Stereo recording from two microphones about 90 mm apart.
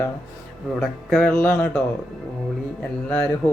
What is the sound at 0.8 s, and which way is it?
Speech, 5° left (ahead or behind).